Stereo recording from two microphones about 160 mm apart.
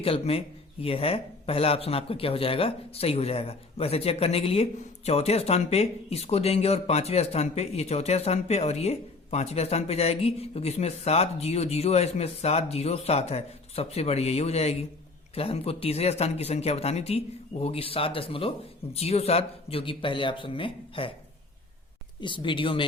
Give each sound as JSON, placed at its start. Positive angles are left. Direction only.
{"t": 0.0, "sound": "speech", "side_deg": 35}
{"t": 22.2, "sound": "speech", "side_deg": 30}